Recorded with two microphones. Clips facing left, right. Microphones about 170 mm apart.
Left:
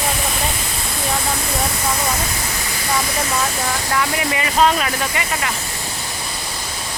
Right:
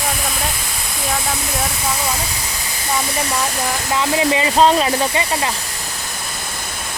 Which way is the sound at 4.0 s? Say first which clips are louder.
Right 6 dB; 25° right (ahead or behind).